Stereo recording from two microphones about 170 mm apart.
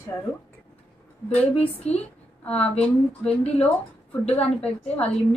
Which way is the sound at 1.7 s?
35° left (ahead or behind).